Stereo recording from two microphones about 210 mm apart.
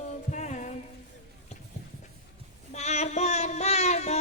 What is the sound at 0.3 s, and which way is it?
Music, 35° left (ahead or behind).